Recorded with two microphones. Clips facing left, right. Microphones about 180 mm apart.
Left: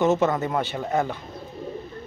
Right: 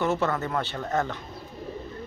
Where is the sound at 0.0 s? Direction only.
20° left (ahead or behind).